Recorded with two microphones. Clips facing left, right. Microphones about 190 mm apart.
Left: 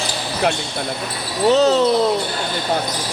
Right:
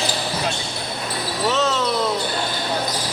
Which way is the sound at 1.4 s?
35° left (ahead or behind).